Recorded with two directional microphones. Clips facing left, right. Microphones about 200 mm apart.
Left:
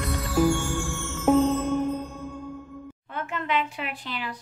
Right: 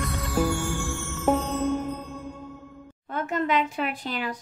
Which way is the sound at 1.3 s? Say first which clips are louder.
Left 4 dB; centre (ahead or behind).